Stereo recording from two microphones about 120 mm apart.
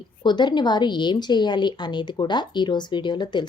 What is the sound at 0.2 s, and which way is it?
Speech, 40° left (ahead or behind).